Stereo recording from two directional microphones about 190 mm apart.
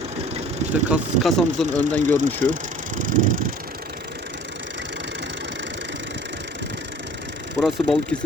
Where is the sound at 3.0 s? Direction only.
45° right (ahead or behind).